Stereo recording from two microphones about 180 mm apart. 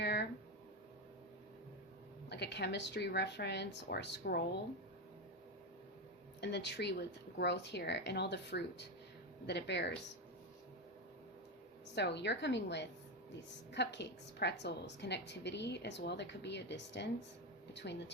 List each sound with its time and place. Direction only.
0.0 s a sound: 65° left (ahead or behind)
2.3 s a woman's voice: 70° left (ahead or behind)
6.4 s a woman's voice: 70° left (ahead or behind)
11.9 s a woman's voice: 70° left (ahead or behind)